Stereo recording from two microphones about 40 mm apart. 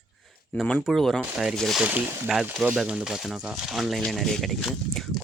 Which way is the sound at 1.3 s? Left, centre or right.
Centre.